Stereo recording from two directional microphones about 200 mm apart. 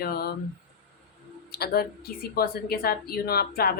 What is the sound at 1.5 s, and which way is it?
Speech, 50° left (ahead or behind).